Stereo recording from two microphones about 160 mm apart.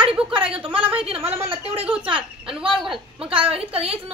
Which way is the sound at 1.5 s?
35° right (ahead or behind).